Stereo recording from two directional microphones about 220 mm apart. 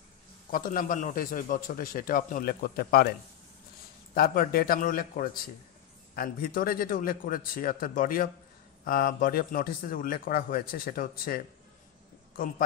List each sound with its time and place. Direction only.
0.5 s a man's voice: 40° left (ahead or behind)
4.1 s a man's voice: 45° left (ahead or behind)